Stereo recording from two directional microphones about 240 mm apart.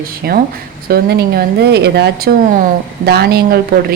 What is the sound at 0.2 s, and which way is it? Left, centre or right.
A woman's voice, right.